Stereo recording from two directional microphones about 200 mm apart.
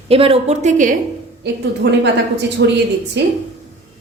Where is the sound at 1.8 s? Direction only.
55° right (ahead or behind).